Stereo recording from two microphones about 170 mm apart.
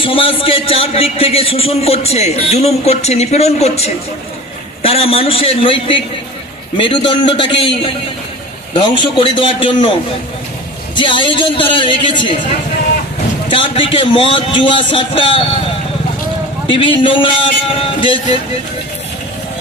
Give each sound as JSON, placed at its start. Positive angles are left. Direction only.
{"t": 0.0, "sound": "a man's voice", "side_deg": 30}
{"t": 9.0, "sound": "a man's voice", "side_deg": 30}
{"t": 10.9, "sound": "a man's voice", "side_deg": 30}
{"t": 13.5, "sound": "a man's voice", "side_deg": 30}
{"t": 16.6, "sound": "a man's voice", "side_deg": 30}